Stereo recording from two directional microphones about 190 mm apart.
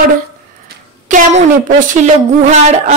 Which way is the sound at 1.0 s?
40° right (ahead or behind).